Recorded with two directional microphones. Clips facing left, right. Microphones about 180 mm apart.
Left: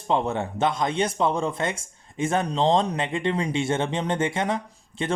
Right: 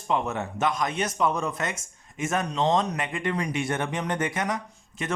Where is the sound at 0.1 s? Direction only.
30° left (ahead or behind).